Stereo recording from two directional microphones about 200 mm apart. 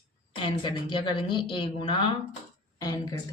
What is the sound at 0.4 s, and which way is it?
A woman's voice, 25° left (ahead or behind).